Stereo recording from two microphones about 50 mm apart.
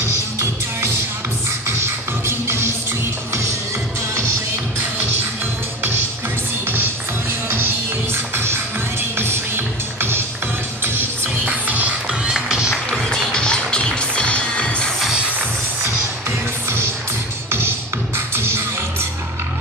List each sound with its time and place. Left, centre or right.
0.0 s music: right
2.2 s music: right
7.4 s music: right
9.9 s music: right
11.4 s music: right
12.1 s music: centre
13.1 s music: centre
15.8 s music: right